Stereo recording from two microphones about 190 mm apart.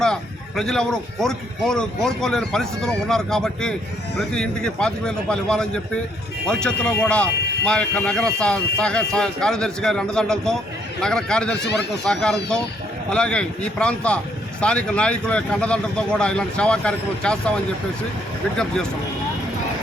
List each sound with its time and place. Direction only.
0.0 s speech: 5° left (ahead or behind)
18.5 s speech: 5° left (ahead or behind)